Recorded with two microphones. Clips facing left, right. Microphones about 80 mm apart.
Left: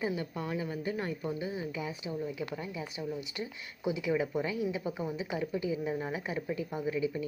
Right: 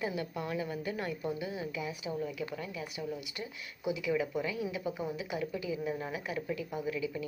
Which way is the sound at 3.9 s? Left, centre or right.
Left.